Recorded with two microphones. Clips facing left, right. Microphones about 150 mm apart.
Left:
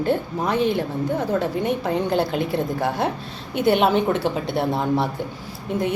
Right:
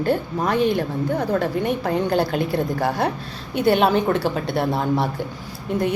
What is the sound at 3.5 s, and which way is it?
Speech, 20° left (ahead or behind).